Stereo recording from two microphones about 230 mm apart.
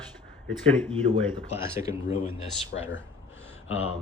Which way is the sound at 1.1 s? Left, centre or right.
Right.